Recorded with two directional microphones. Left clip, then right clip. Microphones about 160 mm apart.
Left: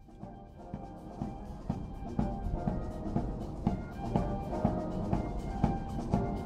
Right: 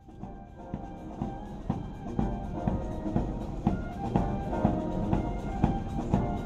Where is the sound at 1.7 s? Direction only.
40° left (ahead or behind).